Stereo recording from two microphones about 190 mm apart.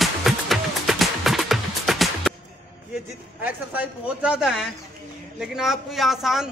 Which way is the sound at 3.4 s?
10° right (ahead or behind).